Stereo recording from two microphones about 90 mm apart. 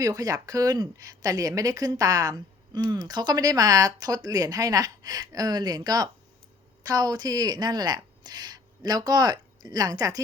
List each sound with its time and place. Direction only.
0.0 s a woman's voice: 40° right (ahead or behind)